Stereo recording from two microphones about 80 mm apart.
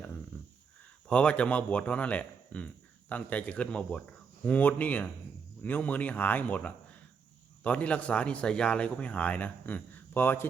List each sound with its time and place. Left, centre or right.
1.0 s speech: centre